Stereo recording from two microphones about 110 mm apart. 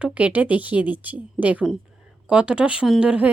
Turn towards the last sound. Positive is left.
turn(degrees=-10)  # may be behind; listen again after turning